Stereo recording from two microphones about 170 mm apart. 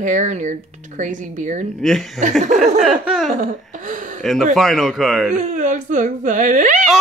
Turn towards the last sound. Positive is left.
turn(degrees=-50)  # may be behind; listen again after turning